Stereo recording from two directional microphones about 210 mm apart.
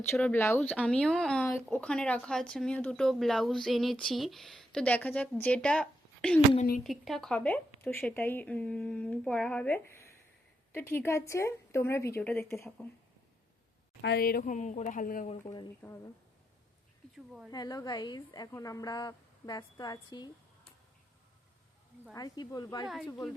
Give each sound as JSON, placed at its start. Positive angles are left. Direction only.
{"t": 0.1, "sound": "speech", "side_deg": 10}
{"t": 14.0, "sound": "speech", "side_deg": 50}
{"t": 15.8, "sound": "speech", "side_deg": 5}
{"t": 17.2, "sound": "speech", "side_deg": -5}
{"t": 17.5, "sound": "a woman's voice", "side_deg": 20}
{"t": 22.1, "sound": "speech", "side_deg": 20}